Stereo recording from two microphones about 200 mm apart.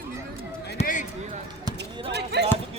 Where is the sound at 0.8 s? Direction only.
40° left (ahead or behind).